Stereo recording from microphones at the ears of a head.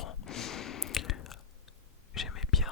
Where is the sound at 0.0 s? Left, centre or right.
Left.